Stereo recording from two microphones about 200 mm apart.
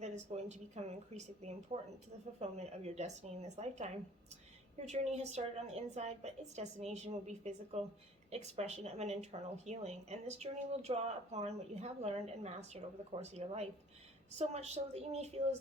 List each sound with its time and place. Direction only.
0.0 s a woman's voice: 35° right (ahead or behind)
4.9 s a woman's voice: 35° right (ahead or behind)